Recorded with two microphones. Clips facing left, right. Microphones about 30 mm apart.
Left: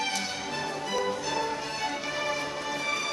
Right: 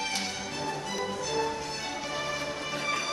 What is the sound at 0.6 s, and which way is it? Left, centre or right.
Music, centre.